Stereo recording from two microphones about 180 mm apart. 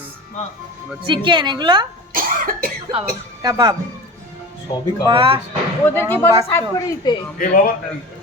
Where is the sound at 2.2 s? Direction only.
50° right (ahead or behind).